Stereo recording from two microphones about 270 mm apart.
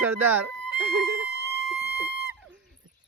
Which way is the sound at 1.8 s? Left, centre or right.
Right.